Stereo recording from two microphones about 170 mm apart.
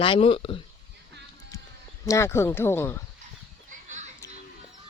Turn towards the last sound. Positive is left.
turn(degrees=-45)  # may be behind; listen again after turning